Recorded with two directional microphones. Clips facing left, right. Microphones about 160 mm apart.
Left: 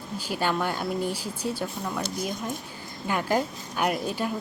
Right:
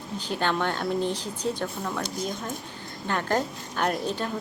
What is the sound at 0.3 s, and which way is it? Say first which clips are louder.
A woman's voice: even; 10° left (ahead or behind).